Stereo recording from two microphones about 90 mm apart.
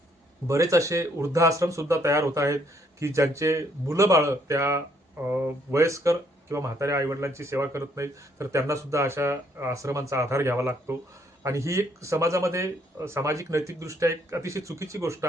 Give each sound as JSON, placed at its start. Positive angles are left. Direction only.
{"t": 0.4, "sound": "speech", "side_deg": -35}
{"t": 5.2, "sound": "speech", "side_deg": -20}
{"t": 5.8, "sound": "speech", "side_deg": -35}